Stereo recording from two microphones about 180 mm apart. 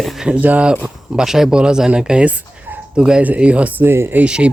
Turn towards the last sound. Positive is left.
turn(degrees=-5)  # may be behind; listen again after turning